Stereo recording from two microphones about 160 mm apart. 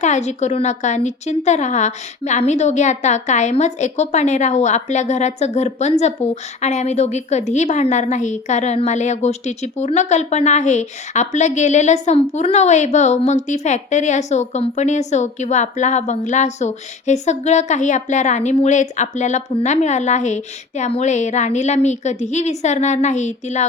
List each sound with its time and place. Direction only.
0.0 s a woman's voice: 45° left (ahead or behind)